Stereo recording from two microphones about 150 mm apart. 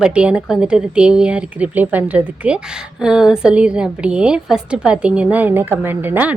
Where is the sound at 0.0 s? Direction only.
5° right (ahead or behind).